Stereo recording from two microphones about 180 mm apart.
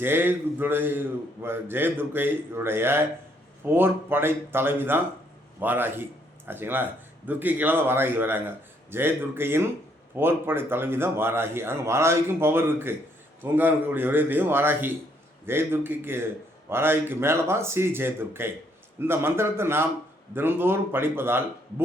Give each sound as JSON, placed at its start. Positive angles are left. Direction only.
{"t": 0.0, "sound": "a man's voice", "side_deg": -10}